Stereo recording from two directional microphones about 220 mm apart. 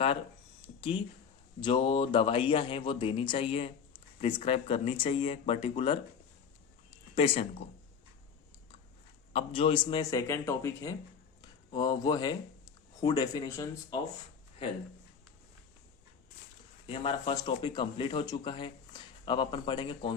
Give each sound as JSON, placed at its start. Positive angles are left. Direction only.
{"t": 0.8, "sound": "speech", "side_deg": 25}
{"t": 6.9, "sound": "a sound", "side_deg": 25}
{"t": 9.3, "sound": "a man's voice", "side_deg": 25}
{"t": 16.8, "sound": "speech", "side_deg": 25}